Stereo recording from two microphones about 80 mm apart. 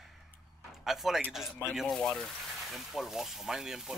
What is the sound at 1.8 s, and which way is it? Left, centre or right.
Speech, centre.